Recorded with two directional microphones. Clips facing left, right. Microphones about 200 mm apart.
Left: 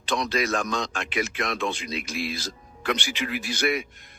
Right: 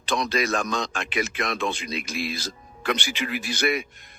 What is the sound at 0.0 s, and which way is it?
Speech, 60° right (ahead or behind).